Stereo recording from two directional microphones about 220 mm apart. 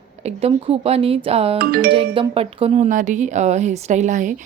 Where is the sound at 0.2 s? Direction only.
30° right (ahead or behind).